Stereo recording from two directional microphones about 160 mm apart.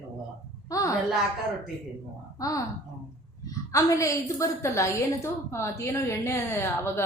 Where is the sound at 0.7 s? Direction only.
20° left (ahead or behind).